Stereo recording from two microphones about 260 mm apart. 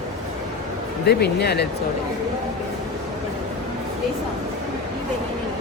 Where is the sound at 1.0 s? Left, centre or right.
Left.